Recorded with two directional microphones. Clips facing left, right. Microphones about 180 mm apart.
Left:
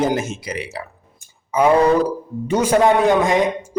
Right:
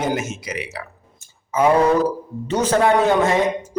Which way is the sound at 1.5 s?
15° left (ahead or behind).